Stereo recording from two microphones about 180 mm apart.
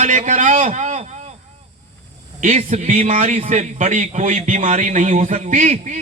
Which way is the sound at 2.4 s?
40° right (ahead or behind).